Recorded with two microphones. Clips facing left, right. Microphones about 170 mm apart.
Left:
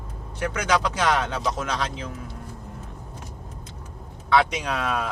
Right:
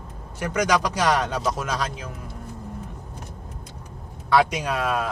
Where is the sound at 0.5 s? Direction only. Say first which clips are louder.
Right 3 dB; 10° right (ahead or behind).